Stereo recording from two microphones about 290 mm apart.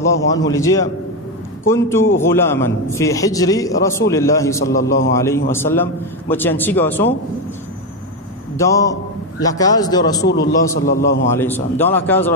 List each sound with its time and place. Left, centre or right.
0.3 s a man's voice: centre
8.5 s a man's voice: centre
10.4 s a man's voice: left
11.2 s a man's voice: centre